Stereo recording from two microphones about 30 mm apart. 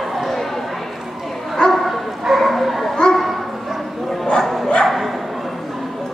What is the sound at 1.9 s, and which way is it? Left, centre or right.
Bow-wow, centre.